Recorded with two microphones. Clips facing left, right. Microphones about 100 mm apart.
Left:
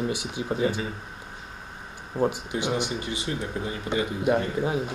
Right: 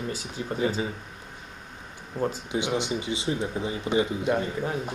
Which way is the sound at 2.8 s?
20° right (ahead or behind).